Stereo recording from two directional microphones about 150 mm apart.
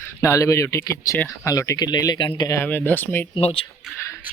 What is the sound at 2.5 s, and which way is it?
Speech, 15° left (ahead or behind).